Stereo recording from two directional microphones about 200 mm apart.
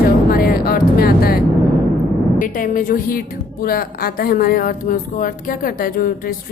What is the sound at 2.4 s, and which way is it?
A woman's voice, 40° left (ahead or behind).